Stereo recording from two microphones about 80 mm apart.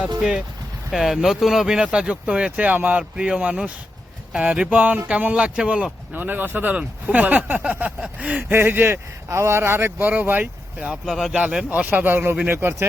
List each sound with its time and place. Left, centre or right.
0.2 s speech: centre
8.4 s speech: right
11.0 s speech: centre
11.3 s speech: centre